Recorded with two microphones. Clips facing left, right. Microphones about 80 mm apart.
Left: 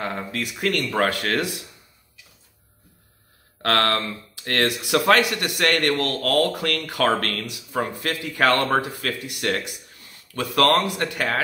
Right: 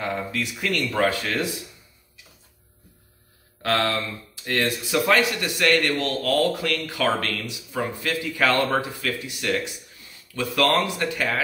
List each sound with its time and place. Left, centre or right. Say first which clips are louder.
0.0 s speech: right 1 dB; left
3.6 s speech: left 2 dB; left